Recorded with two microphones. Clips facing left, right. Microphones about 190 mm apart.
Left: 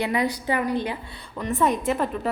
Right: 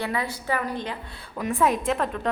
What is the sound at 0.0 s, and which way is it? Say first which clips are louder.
Speech: left 4 dB; 15° left (ahead or behind).